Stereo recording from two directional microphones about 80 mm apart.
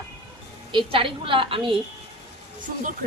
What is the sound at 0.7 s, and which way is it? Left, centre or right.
Speech, right.